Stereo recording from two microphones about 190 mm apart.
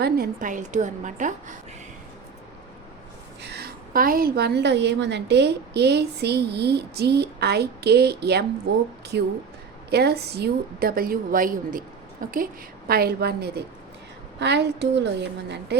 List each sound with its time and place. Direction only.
0.0 s a woman's voice: 50° right (ahead or behind)
3.4 s a woman's voice: 55° right (ahead or behind)